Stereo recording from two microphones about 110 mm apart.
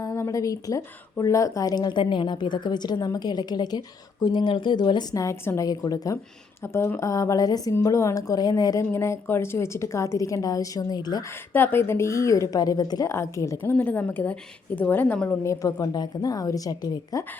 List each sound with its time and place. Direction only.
0.0 s speech: 25° left (ahead or behind)
6.6 s speech: 25° left (ahead or behind)
11.5 s a woman's voice: 20° left (ahead or behind)
15.4 s speech: 35° left (ahead or behind)